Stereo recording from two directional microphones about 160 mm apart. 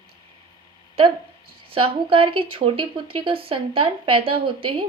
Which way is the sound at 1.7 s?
35° right (ahead or behind).